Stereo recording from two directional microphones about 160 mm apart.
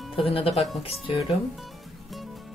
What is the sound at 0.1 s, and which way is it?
Speech, 35° left (ahead or behind).